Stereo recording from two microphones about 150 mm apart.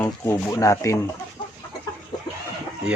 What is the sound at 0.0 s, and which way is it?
Speech, 20° left (ahead or behind).